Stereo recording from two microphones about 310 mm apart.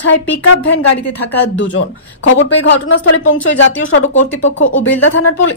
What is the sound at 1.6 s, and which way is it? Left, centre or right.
A woman's voice, left.